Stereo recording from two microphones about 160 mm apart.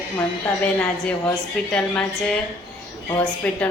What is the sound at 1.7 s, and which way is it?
Speech, 5° left (ahead or behind).